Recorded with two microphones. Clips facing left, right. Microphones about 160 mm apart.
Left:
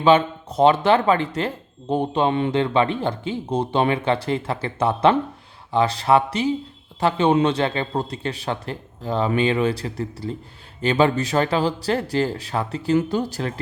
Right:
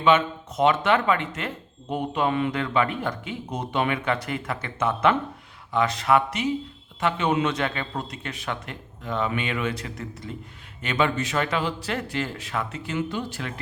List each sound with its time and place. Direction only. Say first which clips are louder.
0.0 s speech: left 4 dB; 35° left (ahead or behind)